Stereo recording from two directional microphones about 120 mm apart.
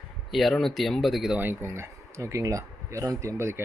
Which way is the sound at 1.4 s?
20° right (ahead or behind).